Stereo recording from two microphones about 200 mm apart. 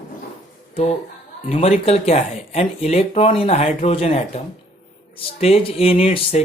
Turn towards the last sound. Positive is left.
turn(degrees=30)  # may be behind; listen again after turning